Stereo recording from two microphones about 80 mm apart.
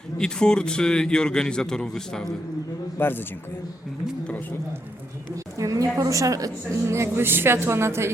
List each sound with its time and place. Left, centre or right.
0.2 s a man's voice: centre
3.0 s a man's voice: left
5.5 s a woman's voice: right